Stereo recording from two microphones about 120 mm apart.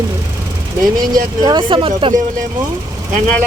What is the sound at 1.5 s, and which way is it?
Speech, 45° right (ahead or behind).